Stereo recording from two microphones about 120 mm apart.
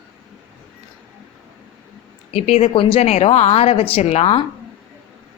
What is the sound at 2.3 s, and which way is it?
A woman's voice, 55° left (ahead or behind).